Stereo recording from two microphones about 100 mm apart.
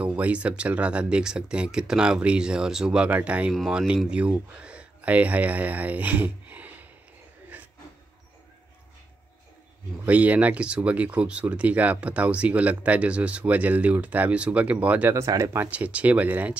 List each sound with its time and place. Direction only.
0.0 s speech: 15° right (ahead or behind)
7.5 s a sound: 15° right (ahead or behind)
10.0 s speech: 15° right (ahead or behind)
15.1 s speech: 30° right (ahead or behind)
15.7 s speech: 15° right (ahead or behind)